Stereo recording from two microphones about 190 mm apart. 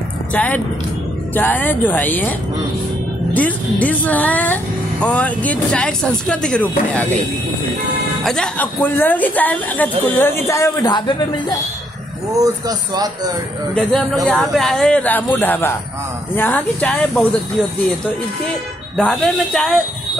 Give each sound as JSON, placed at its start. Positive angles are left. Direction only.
{"t": 0.3, "sound": "speech", "side_deg": 10}
{"t": 3.3, "sound": "speech", "side_deg": 10}
{"t": 8.2, "sound": "speech", "side_deg": 5}
{"t": 12.3, "sound": "speech", "side_deg": -20}
{"t": 13.7, "sound": "speech", "side_deg": 5}
{"t": 18.9, "sound": "speech", "side_deg": 5}